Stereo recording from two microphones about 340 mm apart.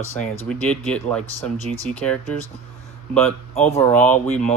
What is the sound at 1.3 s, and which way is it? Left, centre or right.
Speech, centre.